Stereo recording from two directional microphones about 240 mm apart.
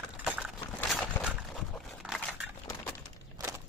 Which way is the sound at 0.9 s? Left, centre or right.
Centre.